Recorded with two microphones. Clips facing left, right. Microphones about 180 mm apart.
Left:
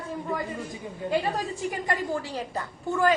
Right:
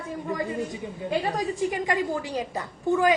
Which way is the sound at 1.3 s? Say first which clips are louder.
Right 4 dB; 15° right (ahead or behind).